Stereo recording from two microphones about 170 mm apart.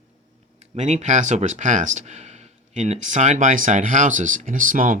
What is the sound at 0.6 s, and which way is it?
Speech, 40° right (ahead or behind).